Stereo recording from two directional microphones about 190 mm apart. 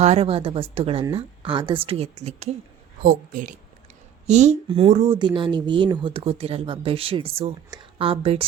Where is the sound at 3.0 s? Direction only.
45° right (ahead or behind).